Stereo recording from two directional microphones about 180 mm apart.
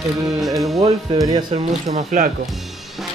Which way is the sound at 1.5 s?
45° right (ahead or behind).